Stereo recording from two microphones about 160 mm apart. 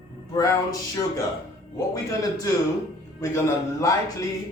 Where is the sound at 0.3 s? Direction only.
20° left (ahead or behind).